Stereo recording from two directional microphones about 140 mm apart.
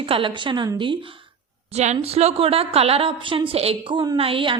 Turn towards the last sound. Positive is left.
turn(degrees=-40)  # may be behind; listen again after turning